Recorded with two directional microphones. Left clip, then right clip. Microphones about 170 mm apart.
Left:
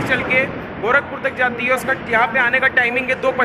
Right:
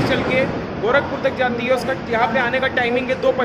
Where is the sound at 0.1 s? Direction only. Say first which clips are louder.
Left 1 dB; 5° right (ahead or behind).